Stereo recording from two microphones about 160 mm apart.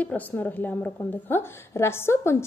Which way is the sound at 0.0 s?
10° left (ahead or behind).